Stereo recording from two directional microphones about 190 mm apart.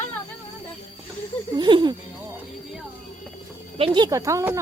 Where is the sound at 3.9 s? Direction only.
20° right (ahead or behind).